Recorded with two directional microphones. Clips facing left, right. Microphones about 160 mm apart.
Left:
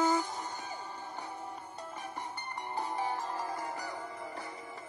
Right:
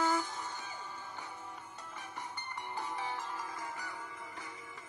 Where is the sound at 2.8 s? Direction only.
40° left (ahead or behind).